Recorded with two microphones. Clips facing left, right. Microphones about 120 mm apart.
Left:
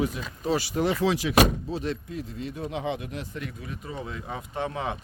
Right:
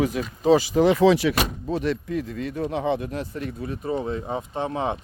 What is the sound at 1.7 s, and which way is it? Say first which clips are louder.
Speech: right 6 dB; 70° right (ahead or behind).